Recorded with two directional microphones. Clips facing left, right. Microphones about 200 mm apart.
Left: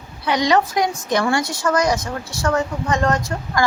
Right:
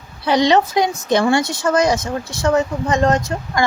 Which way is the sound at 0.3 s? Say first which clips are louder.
Right 3 dB; 30° right (ahead or behind).